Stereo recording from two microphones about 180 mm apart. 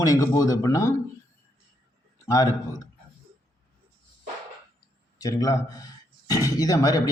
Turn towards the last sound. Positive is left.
turn(degrees=20)  # may be behind; listen again after turning